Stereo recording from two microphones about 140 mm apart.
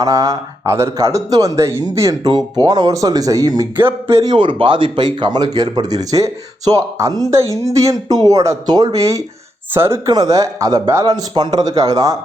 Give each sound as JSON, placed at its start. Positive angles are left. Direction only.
{"t": 0.0, "sound": "speech", "side_deg": -25}
{"t": 4.4, "sound": "speech", "side_deg": -40}